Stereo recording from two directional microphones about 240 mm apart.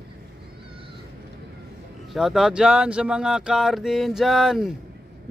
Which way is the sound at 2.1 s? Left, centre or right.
Centre.